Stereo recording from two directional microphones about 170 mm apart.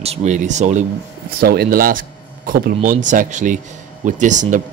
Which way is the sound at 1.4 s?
65° right (ahead or behind).